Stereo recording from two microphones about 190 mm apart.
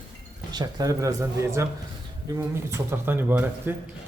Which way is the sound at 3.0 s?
10° right (ahead or behind).